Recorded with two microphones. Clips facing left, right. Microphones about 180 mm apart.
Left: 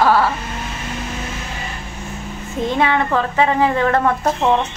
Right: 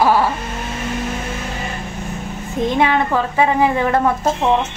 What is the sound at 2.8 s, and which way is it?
A woman's voice, 15° right (ahead or behind).